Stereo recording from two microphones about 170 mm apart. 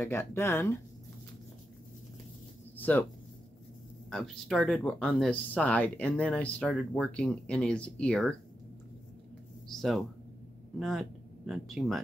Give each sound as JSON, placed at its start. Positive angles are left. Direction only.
{"t": 0.0, "sound": "speech", "side_deg": 15}
{"t": 2.8, "sound": "speech", "side_deg": 10}
{"t": 4.1, "sound": "speech", "side_deg": 0}
{"t": 9.7, "sound": "speech", "side_deg": 0}